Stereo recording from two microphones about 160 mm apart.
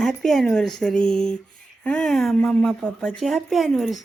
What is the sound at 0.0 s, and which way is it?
Speech, 5° left (ahead or behind).